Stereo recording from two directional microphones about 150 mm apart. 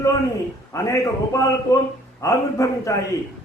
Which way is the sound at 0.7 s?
20° left (ahead or behind).